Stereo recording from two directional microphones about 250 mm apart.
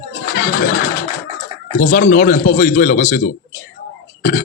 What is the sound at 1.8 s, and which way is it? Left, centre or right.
A man's voice, left.